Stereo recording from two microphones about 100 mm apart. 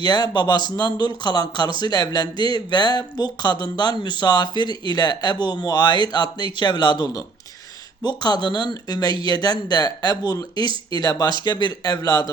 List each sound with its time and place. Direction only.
0.0 s speech: 45° left (ahead or behind)